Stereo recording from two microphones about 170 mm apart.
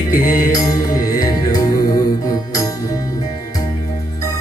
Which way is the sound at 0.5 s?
20° left (ahead or behind).